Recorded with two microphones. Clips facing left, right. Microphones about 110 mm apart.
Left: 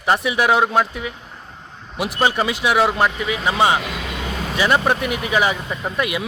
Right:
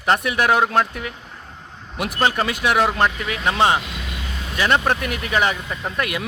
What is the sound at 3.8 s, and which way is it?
Vehicle, 90° left.